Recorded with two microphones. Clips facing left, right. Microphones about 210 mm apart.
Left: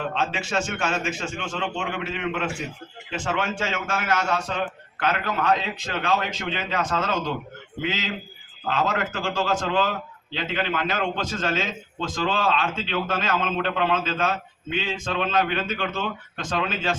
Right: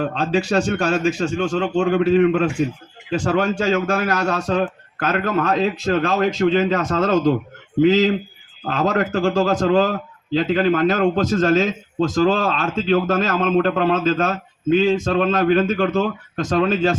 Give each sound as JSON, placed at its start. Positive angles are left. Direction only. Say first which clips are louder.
{"t": 0.0, "sound": "a man's voice", "louder": "right 7 dB", "side_deg": -40}